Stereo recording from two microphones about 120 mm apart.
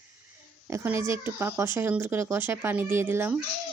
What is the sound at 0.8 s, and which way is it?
Speech, 20° right (ahead or behind).